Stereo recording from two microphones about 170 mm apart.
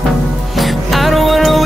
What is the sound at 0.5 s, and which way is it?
Music, centre (ahead or behind).